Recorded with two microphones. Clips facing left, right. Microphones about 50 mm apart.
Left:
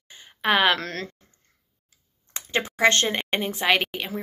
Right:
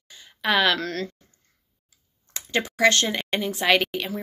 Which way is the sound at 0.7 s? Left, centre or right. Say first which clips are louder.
Right 3 dB; left.